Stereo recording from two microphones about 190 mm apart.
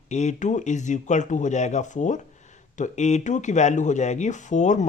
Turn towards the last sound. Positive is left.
turn(degrees=40)  # may be behind; listen again after turning